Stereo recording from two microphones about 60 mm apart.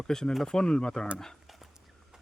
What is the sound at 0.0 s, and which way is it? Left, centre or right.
Speech, centre.